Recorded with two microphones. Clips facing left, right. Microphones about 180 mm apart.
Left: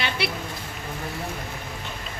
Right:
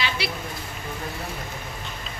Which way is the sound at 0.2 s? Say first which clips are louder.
Left 2 dB; 55° left (ahead or behind).